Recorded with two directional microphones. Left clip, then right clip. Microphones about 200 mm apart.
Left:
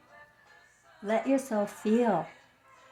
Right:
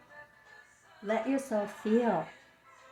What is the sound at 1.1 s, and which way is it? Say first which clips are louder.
A woman's voice: left 3 dB; 55° left (ahead or behind).